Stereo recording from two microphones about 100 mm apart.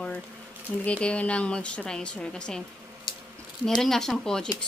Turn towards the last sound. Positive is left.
turn(degrees=5)  # may be behind; listen again after turning